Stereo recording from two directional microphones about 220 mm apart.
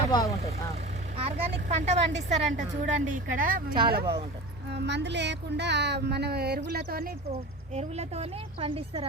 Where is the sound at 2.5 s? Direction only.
35° right (ahead or behind).